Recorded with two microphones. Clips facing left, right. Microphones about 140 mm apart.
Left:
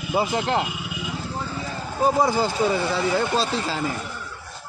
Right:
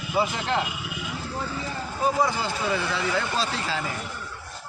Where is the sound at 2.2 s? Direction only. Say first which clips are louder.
Left 5 dB; 35° left (ahead or behind).